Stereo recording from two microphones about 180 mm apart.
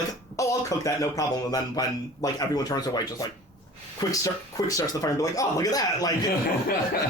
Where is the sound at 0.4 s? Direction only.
15° left (ahead or behind).